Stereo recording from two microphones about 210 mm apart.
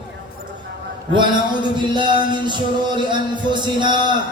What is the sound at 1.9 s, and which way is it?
A man's voice, 20° right (ahead or behind).